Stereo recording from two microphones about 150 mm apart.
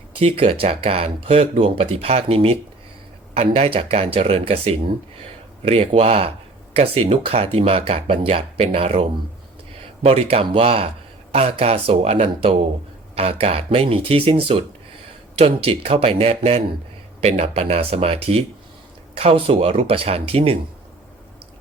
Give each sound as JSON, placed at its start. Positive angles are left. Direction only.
{"t": 0.2, "sound": "speech", "side_deg": -40}